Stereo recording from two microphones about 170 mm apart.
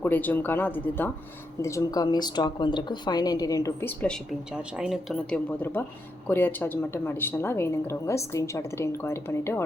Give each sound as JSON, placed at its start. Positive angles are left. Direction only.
{"t": 0.0, "sound": "a woman's voice", "side_deg": 10}
{"t": 4.5, "sound": "a woman's voice", "side_deg": -5}